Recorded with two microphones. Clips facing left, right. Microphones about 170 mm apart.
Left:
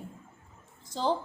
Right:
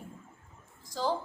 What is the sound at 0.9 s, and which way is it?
Speech, 20° left (ahead or behind).